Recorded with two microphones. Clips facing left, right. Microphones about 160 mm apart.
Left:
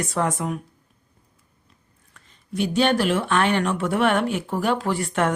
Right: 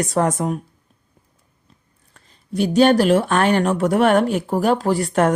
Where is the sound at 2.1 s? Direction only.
40° right (ahead or behind).